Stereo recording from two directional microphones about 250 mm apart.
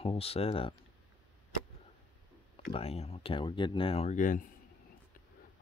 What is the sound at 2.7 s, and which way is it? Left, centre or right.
Speech, left.